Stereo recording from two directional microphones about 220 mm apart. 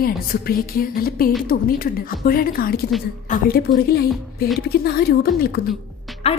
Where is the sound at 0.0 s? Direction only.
40° left (ahead or behind).